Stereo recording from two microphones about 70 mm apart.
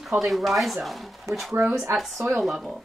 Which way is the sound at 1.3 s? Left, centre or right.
Right.